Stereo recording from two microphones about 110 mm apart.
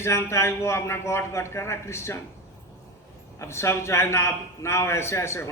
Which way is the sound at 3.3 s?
25° left (ahead or behind).